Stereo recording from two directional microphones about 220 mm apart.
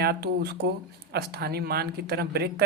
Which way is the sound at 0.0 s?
45° right (ahead or behind).